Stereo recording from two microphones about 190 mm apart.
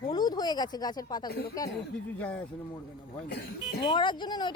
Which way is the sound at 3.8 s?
25° left (ahead or behind).